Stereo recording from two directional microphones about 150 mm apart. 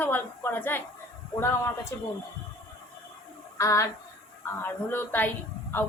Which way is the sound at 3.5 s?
20° left (ahead or behind).